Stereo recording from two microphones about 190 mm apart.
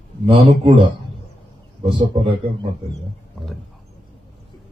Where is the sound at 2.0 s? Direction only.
25° right (ahead or behind).